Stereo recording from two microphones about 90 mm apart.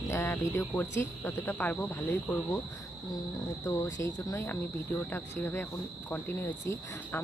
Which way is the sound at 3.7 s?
30° left (ahead or behind).